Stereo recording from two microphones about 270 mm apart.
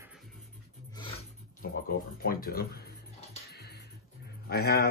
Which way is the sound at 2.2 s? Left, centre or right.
Left.